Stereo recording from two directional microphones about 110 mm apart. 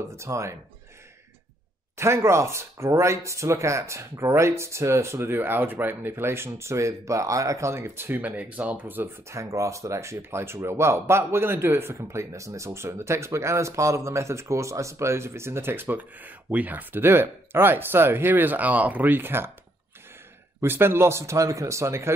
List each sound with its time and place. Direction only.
0.1 s speech: 25° right (ahead or behind)
2.0 s speech: 25° right (ahead or behind)
20.6 s speech: 20° right (ahead or behind)